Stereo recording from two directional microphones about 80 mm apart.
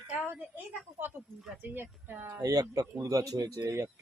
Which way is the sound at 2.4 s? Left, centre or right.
Right.